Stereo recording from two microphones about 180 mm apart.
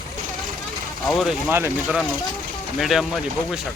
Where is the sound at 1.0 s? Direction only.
Centre (ahead or behind).